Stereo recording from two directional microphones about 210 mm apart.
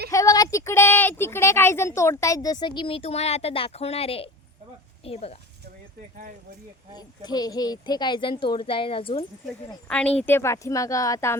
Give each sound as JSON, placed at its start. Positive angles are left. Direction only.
{"t": 0.1, "sound": "speech", "side_deg": 15}
{"t": 6.9, "sound": "speech", "side_deg": 20}
{"t": 9.8, "sound": "speech", "side_deg": 5}